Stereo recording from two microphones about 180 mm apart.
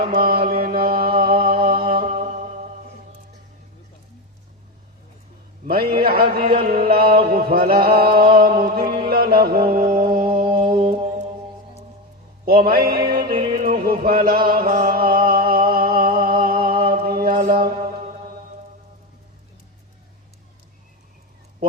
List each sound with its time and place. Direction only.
0.0 s mantra: 55° right (ahead or behind)
2.0 s mantra: 40° right (ahead or behind)
5.6 s a sound: 55° right (ahead or behind)
8.6 s mantra: 55° right (ahead or behind)
9.9 s music: 50° right (ahead or behind)
10.8 s mantra: 25° right (ahead or behind)
12.5 s music: 55° right (ahead or behind)